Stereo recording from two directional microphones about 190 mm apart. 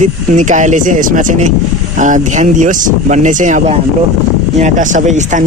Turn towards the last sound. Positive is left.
turn(degrees=-40)  # may be behind; listen again after turning